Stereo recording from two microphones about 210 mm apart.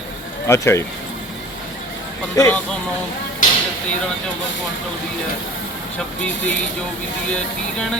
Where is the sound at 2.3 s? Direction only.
15° left (ahead or behind).